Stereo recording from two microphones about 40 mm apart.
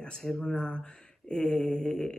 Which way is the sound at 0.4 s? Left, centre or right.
Left.